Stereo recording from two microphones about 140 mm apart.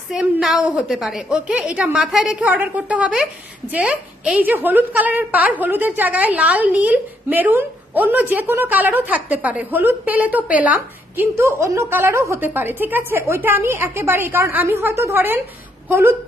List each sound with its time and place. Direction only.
0.1 s a woman's voice: 5° right (ahead or behind)